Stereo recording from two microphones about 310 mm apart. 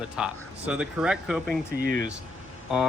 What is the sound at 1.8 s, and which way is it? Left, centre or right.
Speech, right.